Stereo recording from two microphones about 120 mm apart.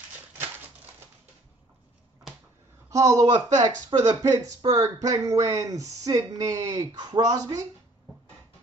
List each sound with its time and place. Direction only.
2.9 s speech: 30° right (ahead or behind)